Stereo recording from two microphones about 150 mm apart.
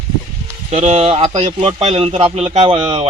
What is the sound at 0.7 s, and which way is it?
Speech, 50° right (ahead or behind).